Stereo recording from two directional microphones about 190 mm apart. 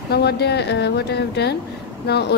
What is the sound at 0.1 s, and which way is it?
A woman's voice, 60° left (ahead or behind).